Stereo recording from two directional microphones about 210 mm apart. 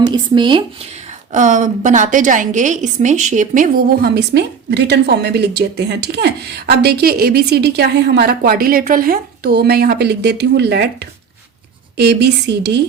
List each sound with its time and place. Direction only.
0.0 s speech: 20° right (ahead or behind)
1.3 s a woman's voice: 35° right (ahead or behind); by 12.8 s 55° right (ahead or behind)